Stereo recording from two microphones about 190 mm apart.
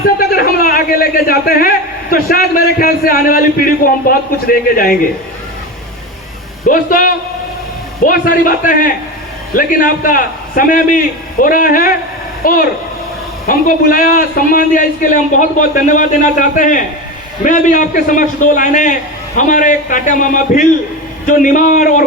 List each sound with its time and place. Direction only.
0.2 s a man's voice: 50° left (ahead or behind)
6.7 s a man's voice: 45° left (ahead or behind)